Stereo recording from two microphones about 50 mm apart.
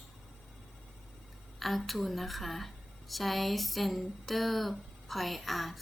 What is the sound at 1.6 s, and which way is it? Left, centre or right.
A woman's voice, centre.